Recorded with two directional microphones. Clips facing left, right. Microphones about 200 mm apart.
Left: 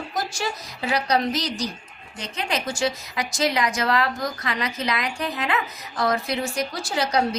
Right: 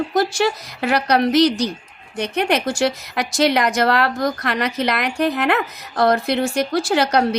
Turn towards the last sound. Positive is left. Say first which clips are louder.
# right 6 dB
turn(degrees=-65)  # may be behind; listen again after turning